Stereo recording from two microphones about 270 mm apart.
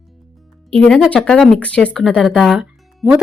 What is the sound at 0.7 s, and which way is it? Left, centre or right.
Speech, centre.